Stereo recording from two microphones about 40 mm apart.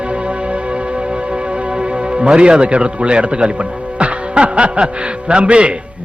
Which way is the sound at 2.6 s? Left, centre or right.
Right.